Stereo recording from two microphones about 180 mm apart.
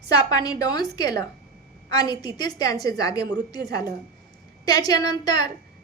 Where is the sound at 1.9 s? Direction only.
20° left (ahead or behind).